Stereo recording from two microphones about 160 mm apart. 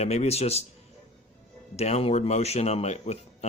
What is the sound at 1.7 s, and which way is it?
Speech, 40° left (ahead or behind).